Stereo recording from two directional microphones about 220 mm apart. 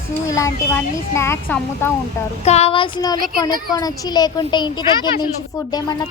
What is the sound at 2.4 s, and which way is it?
A woman's voice, 30° left (ahead or behind).